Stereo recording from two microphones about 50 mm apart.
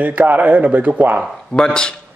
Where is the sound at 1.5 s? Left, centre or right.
Centre.